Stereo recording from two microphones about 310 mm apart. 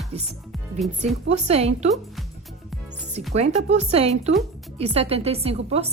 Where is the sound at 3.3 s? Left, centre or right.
Right.